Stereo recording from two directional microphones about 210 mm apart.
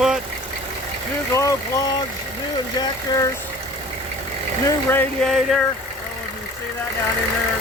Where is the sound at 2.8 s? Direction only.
15° left (ahead or behind).